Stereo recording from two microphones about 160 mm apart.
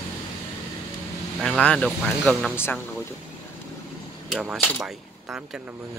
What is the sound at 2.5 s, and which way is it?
Speech, 15° left (ahead or behind).